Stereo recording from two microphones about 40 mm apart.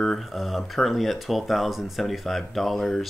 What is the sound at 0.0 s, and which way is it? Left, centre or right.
Speech, centre.